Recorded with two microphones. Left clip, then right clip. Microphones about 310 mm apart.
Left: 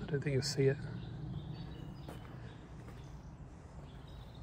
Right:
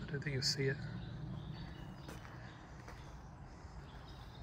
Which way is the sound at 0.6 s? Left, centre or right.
Centre.